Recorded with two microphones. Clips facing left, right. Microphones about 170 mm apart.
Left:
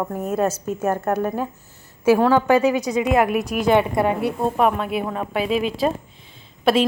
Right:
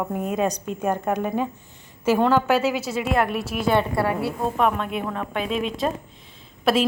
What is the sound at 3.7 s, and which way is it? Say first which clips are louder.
Speech: left 3 dB; 20° left (ahead or behind).